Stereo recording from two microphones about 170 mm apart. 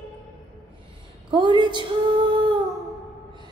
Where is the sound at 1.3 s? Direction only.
30° right (ahead or behind).